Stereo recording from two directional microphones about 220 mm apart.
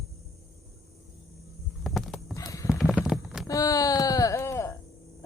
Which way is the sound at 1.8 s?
Centre (ahead or behind).